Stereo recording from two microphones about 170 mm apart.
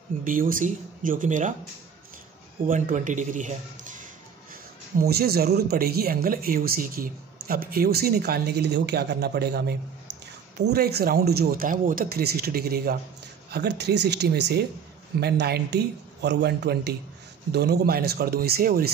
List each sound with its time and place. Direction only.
0.2 s a man's voice: 55° right (ahead or behind)
2.6 s a man's voice: 50° right (ahead or behind)
4.9 s speech: 65° right (ahead or behind)
13.5 s speech: 75° right (ahead or behind)